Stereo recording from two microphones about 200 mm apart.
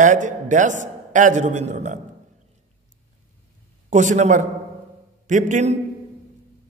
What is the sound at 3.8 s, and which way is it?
A man's voice, 35° right (ahead or behind).